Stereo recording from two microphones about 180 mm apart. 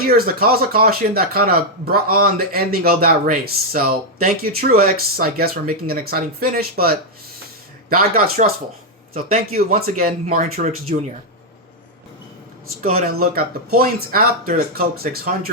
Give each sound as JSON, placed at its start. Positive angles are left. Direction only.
{"t": 0.0, "sound": "speech", "side_deg": -55}
{"t": 9.5, "sound": "speech", "side_deg": -55}
{"t": 13.1, "sound": "speech", "side_deg": -55}